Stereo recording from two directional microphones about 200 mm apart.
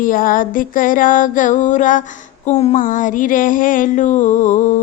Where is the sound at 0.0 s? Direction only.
45° left (ahead or behind).